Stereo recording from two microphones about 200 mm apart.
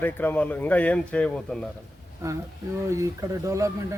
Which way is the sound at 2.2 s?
15° right (ahead or behind).